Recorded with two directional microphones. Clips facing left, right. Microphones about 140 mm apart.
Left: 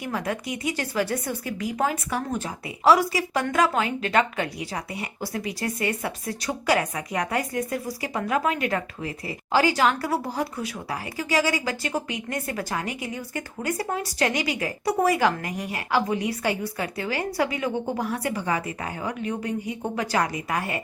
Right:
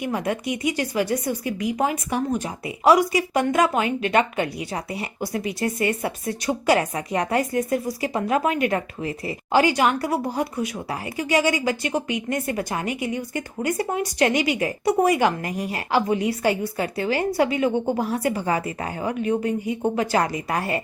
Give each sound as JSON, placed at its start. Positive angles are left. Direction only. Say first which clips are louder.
{"t": 0.0, "sound": "speech", "louder": "right 4 dB", "side_deg": -20}